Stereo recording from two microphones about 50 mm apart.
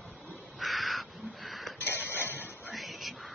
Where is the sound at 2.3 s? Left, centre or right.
Right.